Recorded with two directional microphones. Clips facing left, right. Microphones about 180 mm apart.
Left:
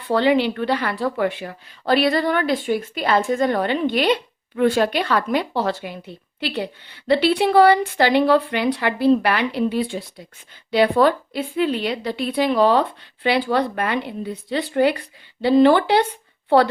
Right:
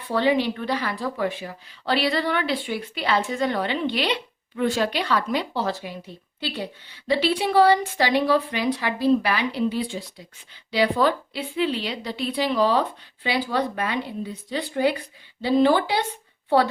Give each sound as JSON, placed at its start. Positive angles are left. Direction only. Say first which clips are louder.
{"t": 0.1, "sound": "a woman's voice", "louder": "left 4 dB", "side_deg": 70}
{"t": 1.8, "sound": "a woman's voice", "louder": "left 5 dB", "side_deg": 50}